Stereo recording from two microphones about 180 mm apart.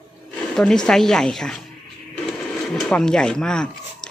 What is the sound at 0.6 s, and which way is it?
Speech, 5° left (ahead or behind).